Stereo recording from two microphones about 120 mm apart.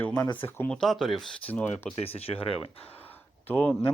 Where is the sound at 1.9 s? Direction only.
55° left (ahead or behind).